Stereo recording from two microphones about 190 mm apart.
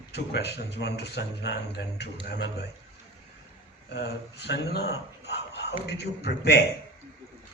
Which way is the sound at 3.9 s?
65° left (ahead or behind).